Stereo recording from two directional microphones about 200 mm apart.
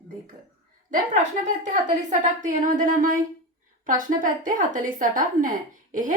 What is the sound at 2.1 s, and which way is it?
Speech, 40° right (ahead or behind).